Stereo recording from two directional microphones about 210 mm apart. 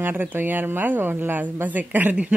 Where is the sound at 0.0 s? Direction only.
10° right (ahead or behind).